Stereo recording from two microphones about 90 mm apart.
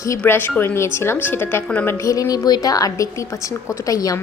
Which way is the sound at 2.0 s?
40° left (ahead or behind).